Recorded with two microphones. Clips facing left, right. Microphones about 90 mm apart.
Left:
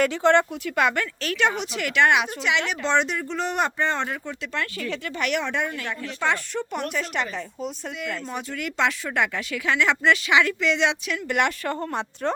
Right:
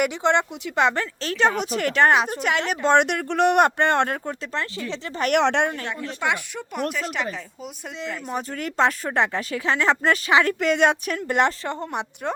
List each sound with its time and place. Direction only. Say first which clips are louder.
0.0 s speech: left 2 dB; 20° right (ahead or behind); by 4.2 s 60° right (ahead or behind)
4.3 s speech: right 1 dB; 30° right (ahead or behind)
5.3 s a woman's voice: right 8 dB; 70° right (ahead or behind)
5.7 s speech: right 1 dB; 25° right (ahead or behind)
6.1 s speech: left 2 dB; 15° right (ahead or behind)
8.3 s speech: right 2 dB; 40° right (ahead or behind)
11.3 s speech: right 2 dB; 30° right (ahead or behind)